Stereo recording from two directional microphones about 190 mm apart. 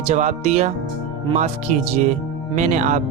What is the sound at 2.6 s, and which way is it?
Speech, 40° right (ahead or behind).